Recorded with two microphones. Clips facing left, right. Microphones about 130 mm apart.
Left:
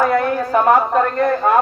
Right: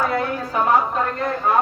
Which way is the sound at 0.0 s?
55° left (ahead or behind).